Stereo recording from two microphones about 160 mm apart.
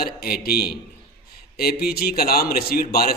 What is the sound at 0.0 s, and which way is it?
A man's voice, 70° left (ahead or behind).